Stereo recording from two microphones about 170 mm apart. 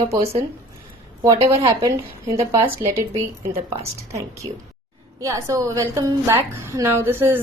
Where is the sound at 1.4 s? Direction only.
35° right (ahead or behind).